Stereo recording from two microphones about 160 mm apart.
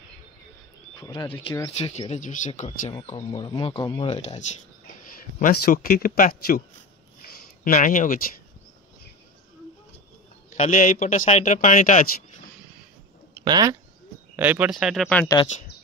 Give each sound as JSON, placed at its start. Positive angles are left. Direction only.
{"t": 0.9, "sound": "speech", "side_deg": 25}
{"t": 3.2, "sound": "speech", "side_deg": 30}
{"t": 5.5, "sound": "speech", "side_deg": 65}
{"t": 10.5, "sound": "speech", "side_deg": 50}
{"t": 13.4, "sound": "speech", "side_deg": -25}
{"t": 14.3, "sound": "speech", "side_deg": -10}